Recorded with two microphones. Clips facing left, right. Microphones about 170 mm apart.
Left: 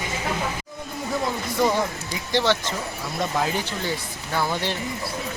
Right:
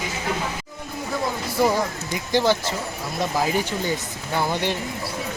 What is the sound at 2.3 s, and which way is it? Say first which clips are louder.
Speech: right 2 dB; 10° right (ahead or behind).